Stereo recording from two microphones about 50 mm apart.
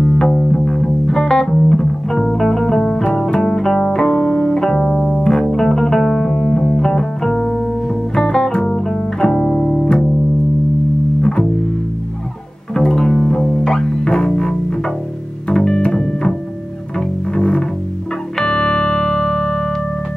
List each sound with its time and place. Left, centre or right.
0.0 s music: centre
11.1 s music: centre
12.7 s music: centre